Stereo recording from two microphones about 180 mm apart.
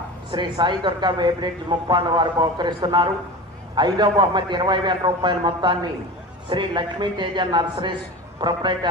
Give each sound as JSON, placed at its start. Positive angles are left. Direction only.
{"t": 0.3, "sound": "a man's voice", "side_deg": -25}